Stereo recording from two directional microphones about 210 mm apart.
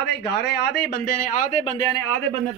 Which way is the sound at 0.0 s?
55° left (ahead or behind).